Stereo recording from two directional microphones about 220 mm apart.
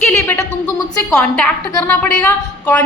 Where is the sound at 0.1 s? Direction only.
10° left (ahead or behind).